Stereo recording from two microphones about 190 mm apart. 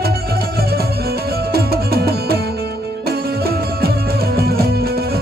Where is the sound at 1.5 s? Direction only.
55° right (ahead or behind).